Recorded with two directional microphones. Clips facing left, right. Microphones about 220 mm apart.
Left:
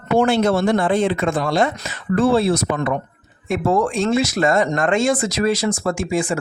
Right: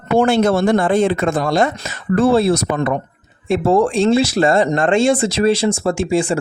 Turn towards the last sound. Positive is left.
turn(degrees=-30)  # may be behind; listen again after turning